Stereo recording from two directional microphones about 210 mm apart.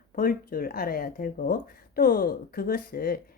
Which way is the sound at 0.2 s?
45° left (ahead or behind).